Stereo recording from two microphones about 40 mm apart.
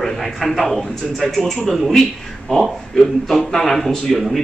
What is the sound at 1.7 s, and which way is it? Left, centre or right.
A man's voice, centre.